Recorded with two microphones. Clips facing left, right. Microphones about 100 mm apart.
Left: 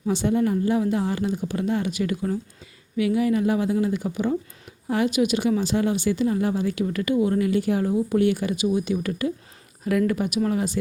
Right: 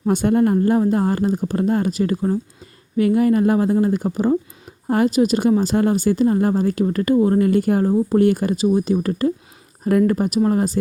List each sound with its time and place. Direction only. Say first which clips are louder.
0.0 s speech: right 5 dB; 50° right (ahead or behind)